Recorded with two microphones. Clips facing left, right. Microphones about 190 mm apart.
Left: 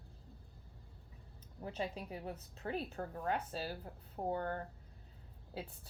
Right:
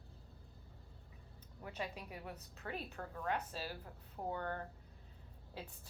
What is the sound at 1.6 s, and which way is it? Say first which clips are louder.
A woman's voice: left 4 dB; 30° left (ahead or behind).